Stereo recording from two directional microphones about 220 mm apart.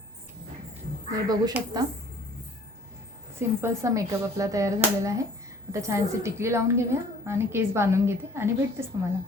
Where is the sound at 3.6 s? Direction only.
15° right (ahead or behind).